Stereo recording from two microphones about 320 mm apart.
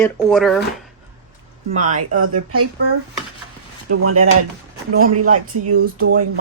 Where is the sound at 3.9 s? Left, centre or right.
Right.